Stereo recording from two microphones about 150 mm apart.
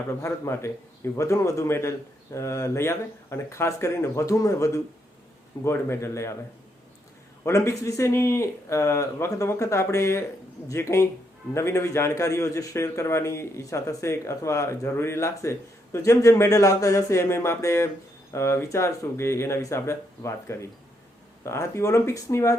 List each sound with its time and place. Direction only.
0.1 s a man's voice: 15° left (ahead or behind)
7.4 s a man's voice: 20° left (ahead or behind)